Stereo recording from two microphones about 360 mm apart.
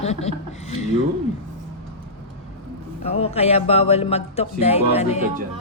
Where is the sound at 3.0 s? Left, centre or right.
Centre.